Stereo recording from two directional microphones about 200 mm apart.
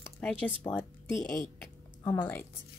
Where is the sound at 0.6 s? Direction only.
5° left (ahead or behind).